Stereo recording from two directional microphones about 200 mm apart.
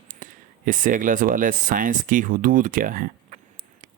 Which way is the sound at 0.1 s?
40° right (ahead or behind).